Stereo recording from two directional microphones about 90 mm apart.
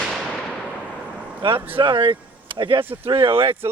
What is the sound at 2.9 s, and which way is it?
Speech, 80° right.